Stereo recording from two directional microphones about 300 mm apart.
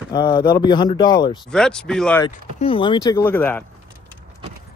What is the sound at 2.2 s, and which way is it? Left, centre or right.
Speech, centre.